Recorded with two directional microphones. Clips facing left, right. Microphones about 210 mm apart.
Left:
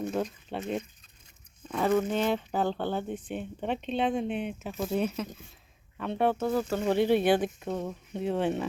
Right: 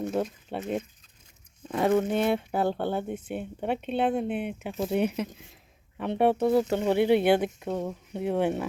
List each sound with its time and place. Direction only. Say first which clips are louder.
0.0 s speech: right 2 dB; 5° right (ahead or behind); by 6.8 s 25° right (ahead or behind)
6.8 s speech: even; 15° right (ahead or behind)